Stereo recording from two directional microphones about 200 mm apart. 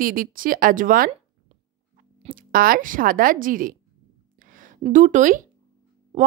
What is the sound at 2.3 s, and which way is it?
A woman's voice, 45° right (ahead or behind).